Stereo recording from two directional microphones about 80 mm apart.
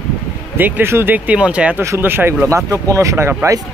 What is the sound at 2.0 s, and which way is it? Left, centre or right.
Speech, right.